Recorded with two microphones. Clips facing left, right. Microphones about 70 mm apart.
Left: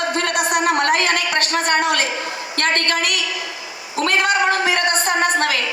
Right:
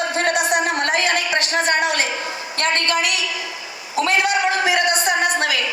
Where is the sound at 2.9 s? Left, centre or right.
Left.